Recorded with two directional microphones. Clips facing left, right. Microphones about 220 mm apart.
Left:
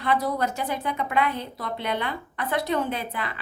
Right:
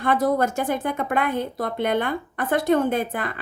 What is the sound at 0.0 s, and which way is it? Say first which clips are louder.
A woman's voice: right 5 dB; 50° right (ahead or behind).